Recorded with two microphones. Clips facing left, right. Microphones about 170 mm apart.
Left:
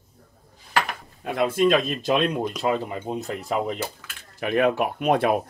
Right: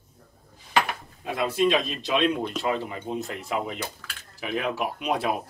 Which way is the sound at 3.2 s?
Centre (ahead or behind).